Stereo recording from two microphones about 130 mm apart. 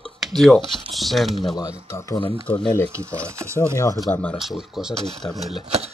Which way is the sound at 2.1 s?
40° left (ahead or behind).